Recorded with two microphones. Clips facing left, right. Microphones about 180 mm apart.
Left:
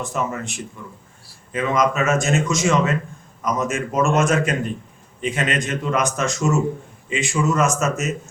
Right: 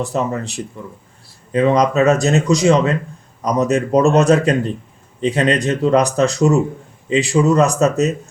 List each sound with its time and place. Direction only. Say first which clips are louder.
0.0 s speech: right 5 dB; 35° right (ahead or behind)